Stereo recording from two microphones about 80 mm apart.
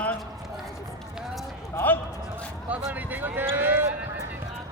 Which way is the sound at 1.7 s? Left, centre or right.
Left.